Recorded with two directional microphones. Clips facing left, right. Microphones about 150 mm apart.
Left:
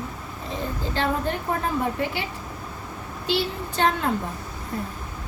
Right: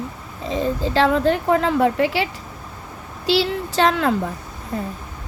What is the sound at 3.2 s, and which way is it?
Speech, 90° right.